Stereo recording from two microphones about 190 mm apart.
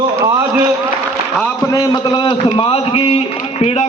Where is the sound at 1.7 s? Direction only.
25° left (ahead or behind).